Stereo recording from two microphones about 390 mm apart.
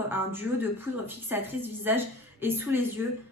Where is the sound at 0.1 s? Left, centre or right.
Centre.